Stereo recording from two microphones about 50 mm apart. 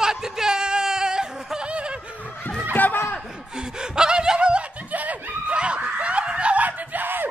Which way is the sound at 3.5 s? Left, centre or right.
Centre.